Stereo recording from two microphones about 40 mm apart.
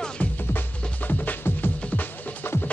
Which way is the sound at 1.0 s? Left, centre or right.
Left.